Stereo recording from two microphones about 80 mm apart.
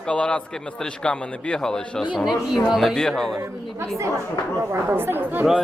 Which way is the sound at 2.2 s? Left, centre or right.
Centre.